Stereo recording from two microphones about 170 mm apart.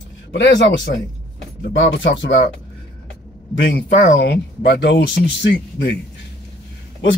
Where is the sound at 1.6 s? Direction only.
90° left.